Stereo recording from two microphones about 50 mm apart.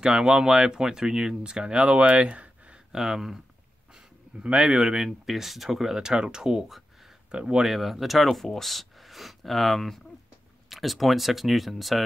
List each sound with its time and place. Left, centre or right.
0.0 s speech: centre
2.9 s speech: centre
3.9 s speech: centre
6.7 s a sound: centre
7.2 s speech: centre